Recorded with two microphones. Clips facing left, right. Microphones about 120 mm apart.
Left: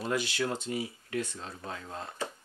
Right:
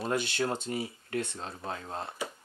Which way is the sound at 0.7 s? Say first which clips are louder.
Even; 35° right (ahead or behind).